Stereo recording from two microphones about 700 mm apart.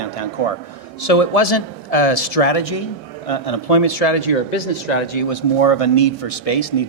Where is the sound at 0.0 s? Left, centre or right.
Left.